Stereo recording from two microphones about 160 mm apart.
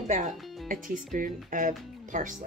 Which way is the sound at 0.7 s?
60° right (ahead or behind).